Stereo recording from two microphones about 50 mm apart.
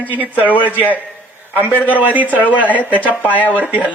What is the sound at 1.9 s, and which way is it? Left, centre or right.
Speech, right.